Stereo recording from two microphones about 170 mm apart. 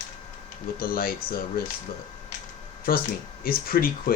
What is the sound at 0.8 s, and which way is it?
Speech, 60° left (ahead or behind).